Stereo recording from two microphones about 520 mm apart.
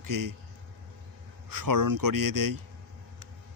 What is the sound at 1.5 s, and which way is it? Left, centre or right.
Speech, right.